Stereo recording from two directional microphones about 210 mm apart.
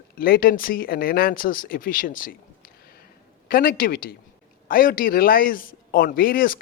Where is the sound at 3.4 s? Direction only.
45° left (ahead or behind).